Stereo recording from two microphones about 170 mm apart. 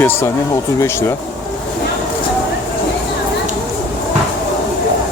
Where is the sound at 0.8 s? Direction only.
15° left (ahead or behind).